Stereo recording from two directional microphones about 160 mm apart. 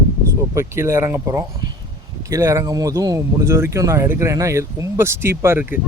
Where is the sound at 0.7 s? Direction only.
15° right (ahead or behind).